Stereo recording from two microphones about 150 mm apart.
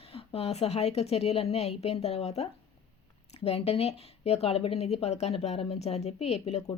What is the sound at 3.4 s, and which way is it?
Speech, 40° left (ahead or behind).